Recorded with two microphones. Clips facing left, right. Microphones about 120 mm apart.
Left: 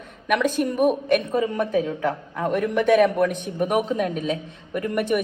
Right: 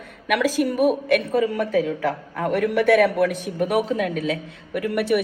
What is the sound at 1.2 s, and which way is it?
A woman's voice, 20° left (ahead or behind).